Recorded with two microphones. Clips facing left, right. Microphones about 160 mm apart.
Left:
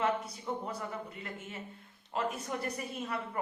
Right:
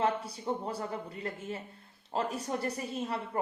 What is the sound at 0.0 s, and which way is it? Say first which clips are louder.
Speech: right 2 dB; 30° right (ahead or behind).